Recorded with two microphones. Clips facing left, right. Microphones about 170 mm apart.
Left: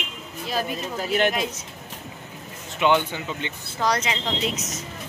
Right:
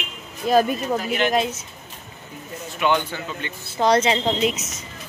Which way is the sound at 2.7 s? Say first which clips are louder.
Left 1 dB; 20° left (ahead or behind).